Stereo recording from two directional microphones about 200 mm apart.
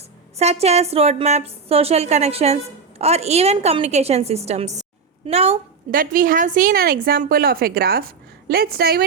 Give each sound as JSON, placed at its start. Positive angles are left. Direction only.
{"t": 0.3, "sound": "a woman's voice", "side_deg": -30}
{"t": 5.9, "sound": "a woman's voice", "side_deg": -45}